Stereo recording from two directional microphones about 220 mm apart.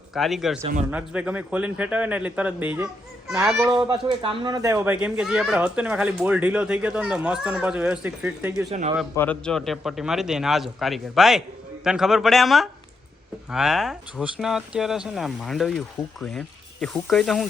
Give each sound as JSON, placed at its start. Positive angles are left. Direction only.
{"t": 0.1, "sound": "a man's voice", "side_deg": 0}
{"t": 3.7, "sound": "speech", "side_deg": -20}
{"t": 8.7, "sound": "a man's voice", "side_deg": -30}
{"t": 9.1, "sound": "speech", "side_deg": 5}
{"t": 16.8, "sound": "speech", "side_deg": 0}